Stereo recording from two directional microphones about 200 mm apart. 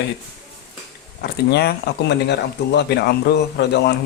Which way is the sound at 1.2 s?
55° left (ahead or behind).